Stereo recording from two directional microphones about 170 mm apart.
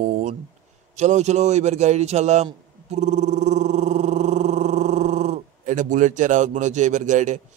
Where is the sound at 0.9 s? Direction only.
40° right (ahead or behind).